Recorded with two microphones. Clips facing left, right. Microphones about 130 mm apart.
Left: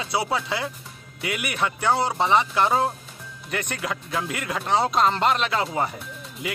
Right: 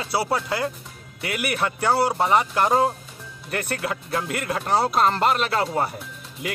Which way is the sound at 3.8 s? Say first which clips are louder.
Right 1 dB; centre (ahead or behind).